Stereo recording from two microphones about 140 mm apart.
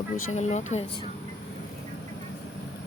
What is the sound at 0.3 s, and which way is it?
Speech, 55° left (ahead or behind).